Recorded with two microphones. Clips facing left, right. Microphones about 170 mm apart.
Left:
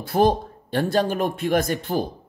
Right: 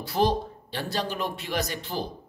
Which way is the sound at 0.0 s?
50° left (ahead or behind).